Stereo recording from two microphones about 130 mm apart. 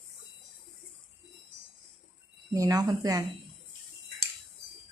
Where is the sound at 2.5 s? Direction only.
30° right (ahead or behind).